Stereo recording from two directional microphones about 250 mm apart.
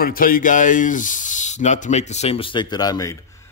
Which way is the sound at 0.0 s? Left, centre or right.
Left.